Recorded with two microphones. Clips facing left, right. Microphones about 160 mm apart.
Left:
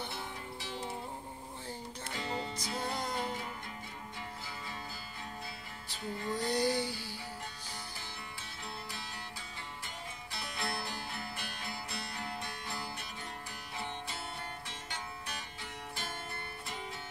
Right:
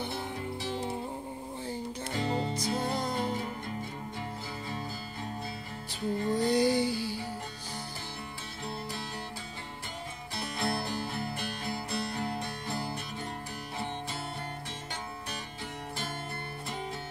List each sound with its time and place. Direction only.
2.1 s music: 35° right (ahead or behind)
6.1 s music: 35° right (ahead or behind)
6.6 s music: 55° right (ahead or behind)
10.6 s music: 35° right (ahead or behind)